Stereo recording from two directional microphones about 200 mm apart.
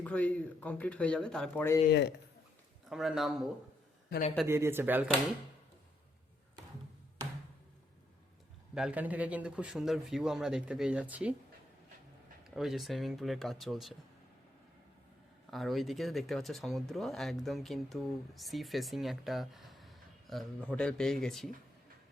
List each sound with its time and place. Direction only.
0.0 s speech: 5° left (ahead or behind)
1.9 s speech: 60° left (ahead or behind)
2.9 s speech: centre (ahead or behind)
4.4 s speech: 15° right (ahead or behind)
8.7 s speech: 5° right (ahead or behind)
12.5 s speech: centre (ahead or behind)
15.4 s speech: centre (ahead or behind)